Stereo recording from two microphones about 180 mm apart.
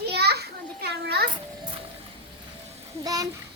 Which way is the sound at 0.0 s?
65° right (ahead or behind).